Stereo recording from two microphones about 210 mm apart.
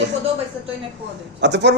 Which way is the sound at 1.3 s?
55° right (ahead or behind).